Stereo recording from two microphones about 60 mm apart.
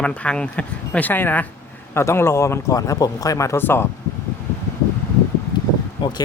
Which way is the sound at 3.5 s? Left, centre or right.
Left.